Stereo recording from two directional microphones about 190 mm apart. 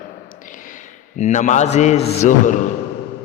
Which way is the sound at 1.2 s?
40° left (ahead or behind).